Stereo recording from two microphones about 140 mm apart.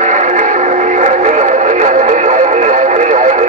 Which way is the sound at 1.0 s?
60° right (ahead or behind).